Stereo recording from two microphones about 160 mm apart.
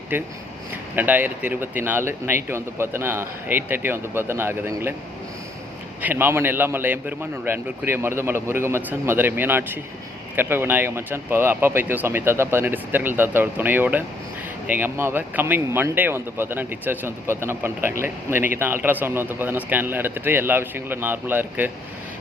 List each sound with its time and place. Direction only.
0.1 s speech: 10° right (ahead or behind)
6.0 s speech: 10° right (ahead or behind)